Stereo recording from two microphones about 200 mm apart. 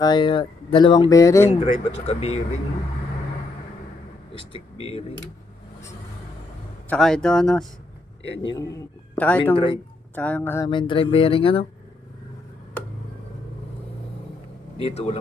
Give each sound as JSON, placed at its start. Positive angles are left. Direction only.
{"t": 0.0, "sound": "speech", "side_deg": 25}
{"t": 1.5, "sound": "speech", "side_deg": 35}
{"t": 4.4, "sound": "speech", "side_deg": 30}
{"t": 6.9, "sound": "speech", "side_deg": 5}
{"t": 8.2, "sound": "a man's voice", "side_deg": 65}
{"t": 8.4, "sound": "speech", "side_deg": 15}
{"t": 10.7, "sound": "speech", "side_deg": 25}
{"t": 14.8, "sound": "speech", "side_deg": 30}